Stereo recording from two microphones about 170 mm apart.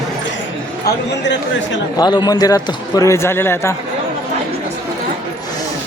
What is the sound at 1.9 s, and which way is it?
Speech, 25° left (ahead or behind).